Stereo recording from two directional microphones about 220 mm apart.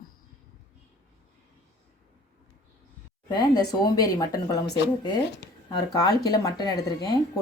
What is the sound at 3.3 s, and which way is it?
Speech, 20° left (ahead or behind).